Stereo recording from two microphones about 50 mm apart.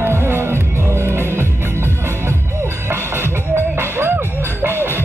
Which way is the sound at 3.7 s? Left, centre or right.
Right.